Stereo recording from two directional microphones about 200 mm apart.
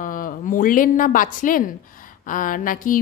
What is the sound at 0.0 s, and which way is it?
A woman's voice, 45° left (ahead or behind).